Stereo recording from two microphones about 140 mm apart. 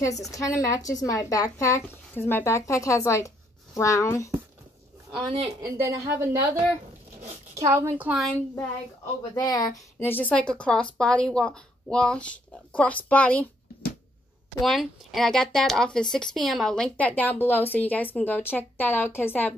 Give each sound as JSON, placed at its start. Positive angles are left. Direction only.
{"t": 0.3, "sound": "speech", "side_deg": 25}
{"t": 5.1, "sound": "a woman's voice", "side_deg": -40}
{"t": 5.6, "sound": "a woman's voice", "side_deg": -20}
{"t": 9.3, "sound": "speech", "side_deg": 25}
{"t": 9.9, "sound": "speech", "side_deg": 15}
{"t": 14.6, "sound": "speech", "side_deg": 0}